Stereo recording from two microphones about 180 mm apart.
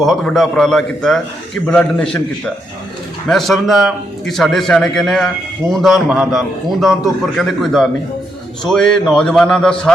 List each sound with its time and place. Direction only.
0.0 s a man's voice: centre (ahead or behind)
3.2 s a man's voice: centre (ahead or behind)